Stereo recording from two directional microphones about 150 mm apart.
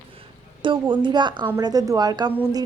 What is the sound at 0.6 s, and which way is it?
A woman's voice, 30° right (ahead or behind).